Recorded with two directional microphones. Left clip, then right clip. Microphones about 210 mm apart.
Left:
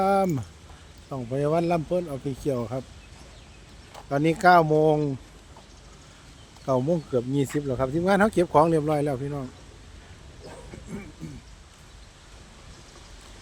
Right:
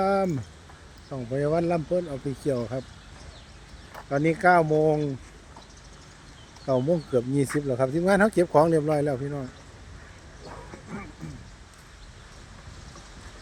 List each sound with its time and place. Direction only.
0.0 s speech: 10° left (ahead or behind)
4.1 s speech: 15° left (ahead or behind)
6.7 s speech: 10° left (ahead or behind)